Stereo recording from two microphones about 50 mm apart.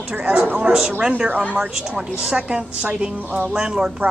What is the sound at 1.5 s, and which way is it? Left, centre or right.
A woman's voice, centre.